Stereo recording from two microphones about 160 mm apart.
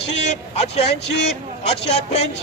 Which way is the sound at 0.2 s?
45° left (ahead or behind).